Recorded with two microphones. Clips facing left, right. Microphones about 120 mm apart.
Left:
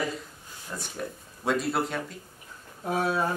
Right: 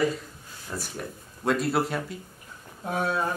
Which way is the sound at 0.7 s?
10° right (ahead or behind).